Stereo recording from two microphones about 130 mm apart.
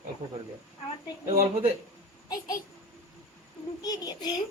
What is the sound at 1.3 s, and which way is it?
Speech, 55° right (ahead or behind).